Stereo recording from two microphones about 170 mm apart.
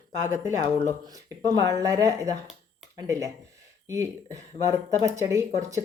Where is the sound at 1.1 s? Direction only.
20° right (ahead or behind).